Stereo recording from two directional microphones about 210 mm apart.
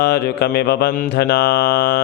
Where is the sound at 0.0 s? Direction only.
50° left (ahead or behind).